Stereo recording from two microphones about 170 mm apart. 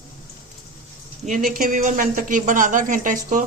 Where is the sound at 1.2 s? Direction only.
50° right (ahead or behind).